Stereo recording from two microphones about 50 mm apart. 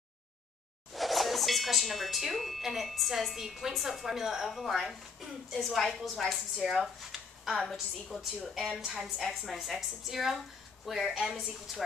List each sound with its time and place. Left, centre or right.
0.9 s speech: centre
8.5 s a woman's voice: right
9.0 s speech: centre